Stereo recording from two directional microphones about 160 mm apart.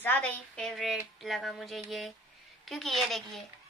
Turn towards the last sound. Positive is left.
turn(degrees=0)  # may be behind; listen again after turning